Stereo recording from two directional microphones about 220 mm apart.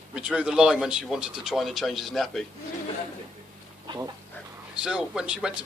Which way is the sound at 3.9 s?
20° right (ahead or behind).